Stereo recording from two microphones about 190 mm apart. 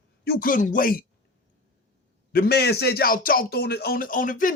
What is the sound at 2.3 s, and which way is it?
Speech, 55° left (ahead or behind).